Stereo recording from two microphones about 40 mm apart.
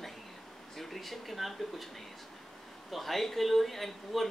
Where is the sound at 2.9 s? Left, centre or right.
Centre.